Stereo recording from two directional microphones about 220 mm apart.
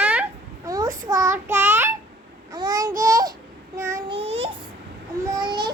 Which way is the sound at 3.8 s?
15° right (ahead or behind).